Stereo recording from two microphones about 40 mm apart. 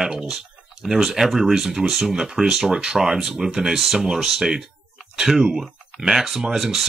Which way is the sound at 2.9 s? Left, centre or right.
Centre.